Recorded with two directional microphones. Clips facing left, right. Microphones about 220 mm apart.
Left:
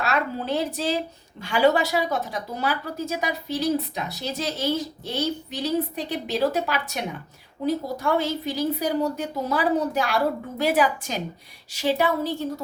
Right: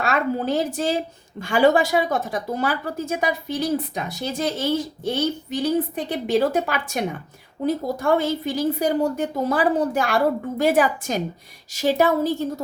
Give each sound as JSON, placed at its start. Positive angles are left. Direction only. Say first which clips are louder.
{"t": 0.0, "sound": "a woman's voice", "louder": "right 4 dB", "side_deg": -50}